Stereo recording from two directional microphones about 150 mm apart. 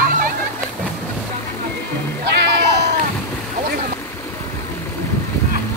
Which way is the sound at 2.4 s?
90° right.